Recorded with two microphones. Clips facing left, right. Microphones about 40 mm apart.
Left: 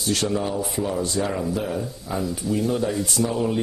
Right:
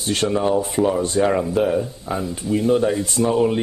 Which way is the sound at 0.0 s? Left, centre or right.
Right.